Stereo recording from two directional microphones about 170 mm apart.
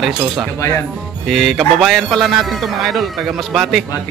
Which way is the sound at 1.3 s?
Centre (ahead or behind).